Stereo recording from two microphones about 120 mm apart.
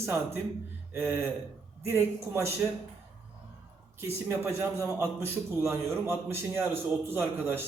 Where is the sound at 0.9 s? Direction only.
20° right (ahead or behind).